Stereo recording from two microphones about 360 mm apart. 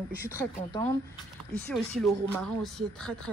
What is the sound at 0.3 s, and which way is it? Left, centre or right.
Speech, centre.